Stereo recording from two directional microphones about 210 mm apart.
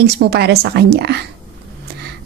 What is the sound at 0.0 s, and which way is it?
A woman's voice, 50° right (ahead or behind).